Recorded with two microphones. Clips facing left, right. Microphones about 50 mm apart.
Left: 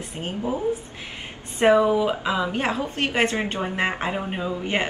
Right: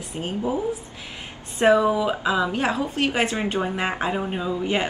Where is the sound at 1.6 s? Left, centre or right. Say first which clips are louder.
Even; left.